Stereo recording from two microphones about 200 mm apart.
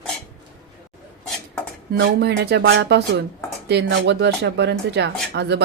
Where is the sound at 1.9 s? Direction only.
55° right (ahead or behind).